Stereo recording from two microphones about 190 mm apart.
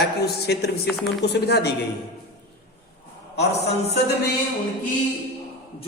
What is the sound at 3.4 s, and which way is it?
Speech, 60° left (ahead or behind).